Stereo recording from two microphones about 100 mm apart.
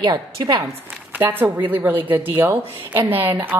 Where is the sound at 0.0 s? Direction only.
45° right (ahead or behind).